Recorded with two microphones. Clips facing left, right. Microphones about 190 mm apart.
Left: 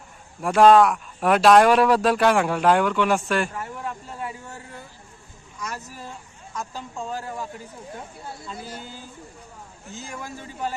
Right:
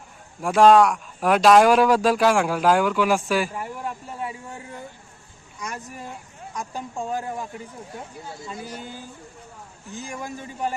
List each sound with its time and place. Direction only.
0.4 s speech: centre (ahead or behind); by 7.4 s 15° right (ahead or behind)
9.9 s speech: 15° right (ahead or behind)